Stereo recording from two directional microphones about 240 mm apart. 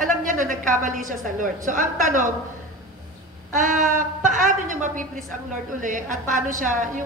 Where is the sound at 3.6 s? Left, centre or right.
Right.